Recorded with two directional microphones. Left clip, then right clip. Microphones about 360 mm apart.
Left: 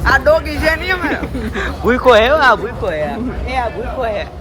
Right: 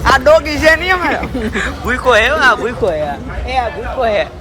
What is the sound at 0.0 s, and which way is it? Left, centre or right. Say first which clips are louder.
A man's voice: right 3 dB; right.